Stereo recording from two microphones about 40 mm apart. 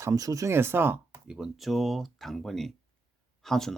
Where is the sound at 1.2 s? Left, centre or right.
Right.